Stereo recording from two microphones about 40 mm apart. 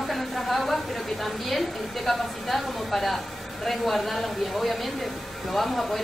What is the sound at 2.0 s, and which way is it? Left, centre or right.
Speech, centre.